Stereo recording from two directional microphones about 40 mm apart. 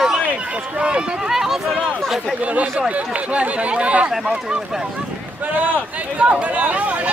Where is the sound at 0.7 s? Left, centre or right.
Right.